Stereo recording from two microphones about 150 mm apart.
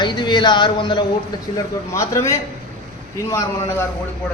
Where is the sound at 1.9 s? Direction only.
20° left (ahead or behind).